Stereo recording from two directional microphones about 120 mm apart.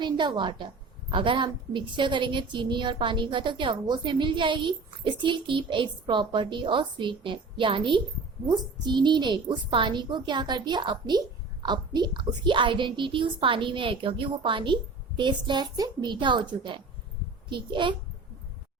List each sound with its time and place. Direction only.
0.0 s a woman's voice: 40° right (ahead or behind)